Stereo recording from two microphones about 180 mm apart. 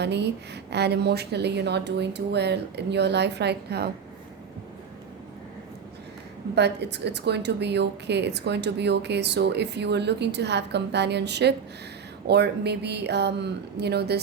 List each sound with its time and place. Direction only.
0.0 s a woman's voice: 70° right (ahead or behind)
6.6 s a woman's voice: 70° right (ahead or behind)